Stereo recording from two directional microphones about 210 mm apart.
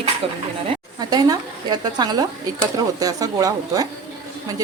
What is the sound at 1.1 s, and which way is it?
A woman's voice, 20° right (ahead or behind).